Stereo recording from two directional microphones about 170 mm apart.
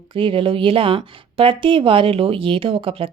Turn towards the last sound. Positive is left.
turn(degrees=-30)  # may be behind; listen again after turning